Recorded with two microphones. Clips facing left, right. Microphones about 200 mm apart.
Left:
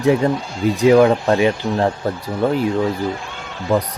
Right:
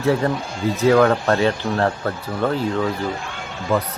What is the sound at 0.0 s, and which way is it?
Speech, 15° left (ahead or behind).